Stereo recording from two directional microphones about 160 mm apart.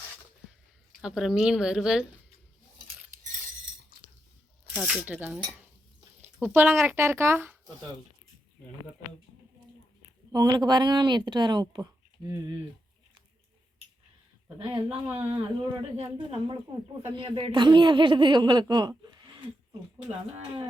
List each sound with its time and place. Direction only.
1.0 s a woman's voice: 5° right (ahead or behind)
4.7 s speech: 5° right (ahead or behind)
6.5 s speech: 15° right (ahead or behind)
10.3 s speech: 25° right (ahead or behind)
14.6 s speech: 35° right (ahead or behind)